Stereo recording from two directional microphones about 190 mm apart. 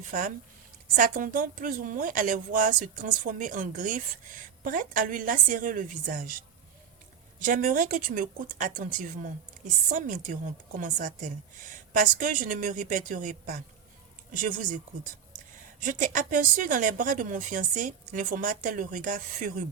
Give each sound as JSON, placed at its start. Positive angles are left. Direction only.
{"t": 0.1, "sound": "speech", "side_deg": -45}
{"t": 15.8, "sound": "speech", "side_deg": -45}